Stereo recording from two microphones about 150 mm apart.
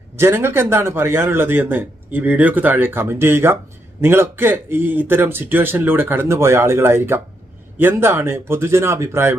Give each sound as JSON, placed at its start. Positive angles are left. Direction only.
{"t": 0.2, "sound": "a man's voice", "side_deg": -15}